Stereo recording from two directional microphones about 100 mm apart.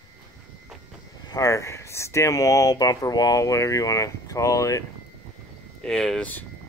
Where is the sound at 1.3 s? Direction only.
35° left (ahead or behind).